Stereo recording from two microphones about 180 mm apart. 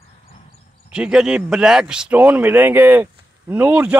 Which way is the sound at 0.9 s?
5° right (ahead or behind).